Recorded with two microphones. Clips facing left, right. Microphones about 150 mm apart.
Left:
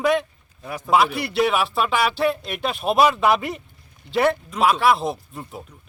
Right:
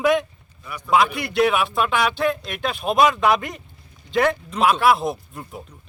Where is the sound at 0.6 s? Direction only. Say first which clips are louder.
Left 4 dB; 50° left (ahead or behind).